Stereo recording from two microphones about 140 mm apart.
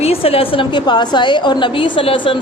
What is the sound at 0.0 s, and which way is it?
A woman's voice, 45° left (ahead or behind).